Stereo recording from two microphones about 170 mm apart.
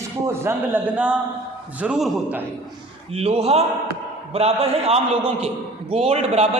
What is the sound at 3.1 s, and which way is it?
A man's voice, 35° right (ahead or behind).